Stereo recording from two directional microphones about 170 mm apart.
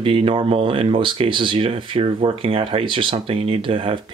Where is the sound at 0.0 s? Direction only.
30° right (ahead or behind).